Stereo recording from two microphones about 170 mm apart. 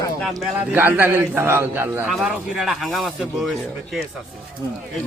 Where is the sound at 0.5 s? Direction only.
10° right (ahead or behind).